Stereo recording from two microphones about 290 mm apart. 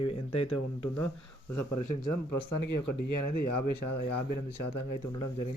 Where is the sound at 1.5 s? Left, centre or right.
Left.